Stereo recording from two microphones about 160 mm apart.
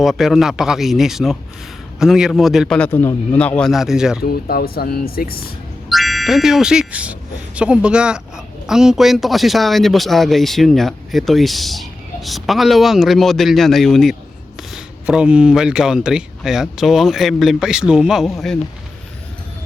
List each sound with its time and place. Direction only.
0.0 s speech: centre (ahead or behind)
4.2 s speech: 70° left (ahead or behind)
5.9 s speech: centre (ahead or behind)